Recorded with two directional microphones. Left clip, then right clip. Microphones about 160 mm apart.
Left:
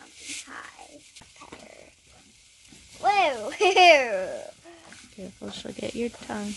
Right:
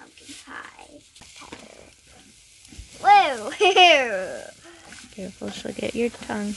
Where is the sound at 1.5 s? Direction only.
Centre (ahead or behind).